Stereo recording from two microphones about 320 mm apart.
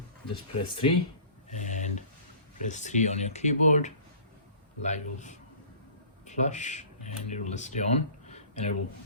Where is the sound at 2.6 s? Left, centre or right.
Left.